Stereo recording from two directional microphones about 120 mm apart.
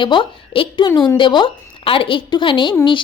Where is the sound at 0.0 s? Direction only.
45° left (ahead or behind).